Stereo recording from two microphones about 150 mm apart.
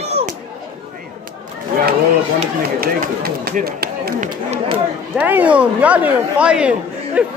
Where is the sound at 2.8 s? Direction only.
85° right.